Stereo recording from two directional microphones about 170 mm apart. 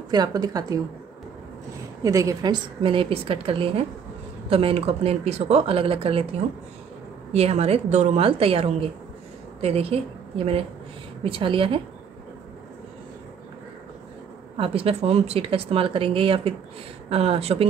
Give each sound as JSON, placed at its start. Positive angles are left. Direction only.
{"t": 0.1, "sound": "a woman's voice", "side_deg": -20}
{"t": 2.0, "sound": "speech", "side_deg": -20}
{"t": 7.3, "sound": "a woman's voice", "side_deg": -40}
{"t": 14.6, "sound": "speech", "side_deg": -35}